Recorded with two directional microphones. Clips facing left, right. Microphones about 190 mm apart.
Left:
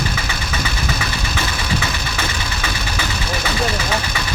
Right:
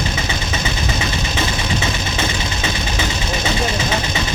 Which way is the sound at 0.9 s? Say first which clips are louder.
Right 3 dB; 25° right (ahead or behind).